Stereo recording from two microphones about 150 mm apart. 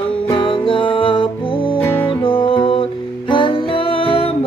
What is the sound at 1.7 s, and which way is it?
Music, 15° left (ahead or behind).